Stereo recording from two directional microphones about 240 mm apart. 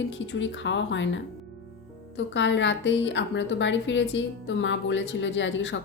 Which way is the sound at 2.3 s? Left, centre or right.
Left.